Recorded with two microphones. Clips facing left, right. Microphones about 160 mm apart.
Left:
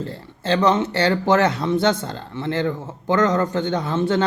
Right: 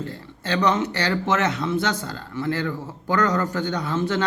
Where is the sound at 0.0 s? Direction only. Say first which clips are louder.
Left 4 dB; 30° left (ahead or behind).